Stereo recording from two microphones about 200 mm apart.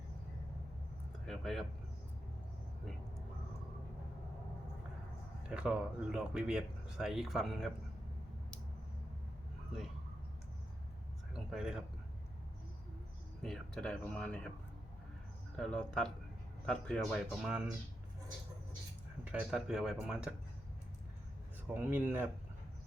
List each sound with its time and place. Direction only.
1.3 s speech: centre (ahead or behind)
5.5 s speech: 5° right (ahead or behind)
11.3 s a sound: 5° right (ahead or behind)
13.4 s speech: 5° left (ahead or behind)
15.5 s speech: 5° left (ahead or behind)
19.2 s speech: 5° right (ahead or behind)
21.7 s speech: 10° right (ahead or behind)